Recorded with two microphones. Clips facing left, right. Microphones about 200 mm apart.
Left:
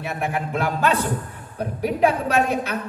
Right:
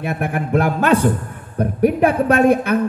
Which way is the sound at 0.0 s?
55° right (ahead or behind).